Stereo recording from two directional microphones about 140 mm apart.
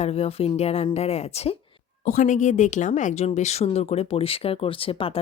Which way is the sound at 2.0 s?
60° left (ahead or behind).